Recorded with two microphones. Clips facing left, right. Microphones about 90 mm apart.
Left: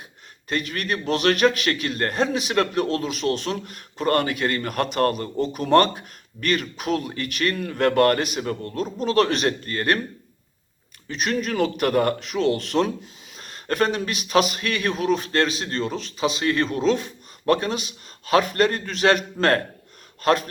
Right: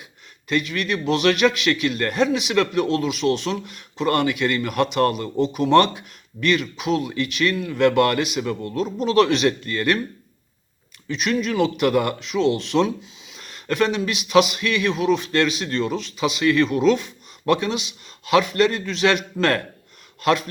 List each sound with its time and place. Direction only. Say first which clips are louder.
0.4 s a man's voice: right 3 dB; 40° left (ahead or behind)
11.1 s a man's voice: right 2 dB; 40° left (ahead or behind)